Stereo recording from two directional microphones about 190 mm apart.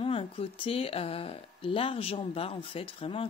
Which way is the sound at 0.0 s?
30° left (ahead or behind).